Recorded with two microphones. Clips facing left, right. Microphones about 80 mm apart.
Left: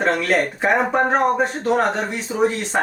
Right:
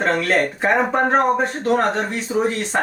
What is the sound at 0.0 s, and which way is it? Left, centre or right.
Speech, centre.